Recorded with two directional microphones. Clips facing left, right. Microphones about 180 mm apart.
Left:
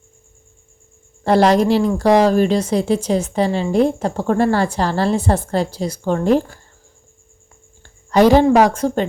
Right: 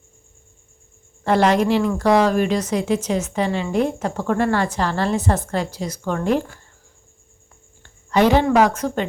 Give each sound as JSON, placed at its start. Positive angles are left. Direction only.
{"t": 1.2, "sound": "speech", "side_deg": 35}
{"t": 7.8, "sound": "speech", "side_deg": 35}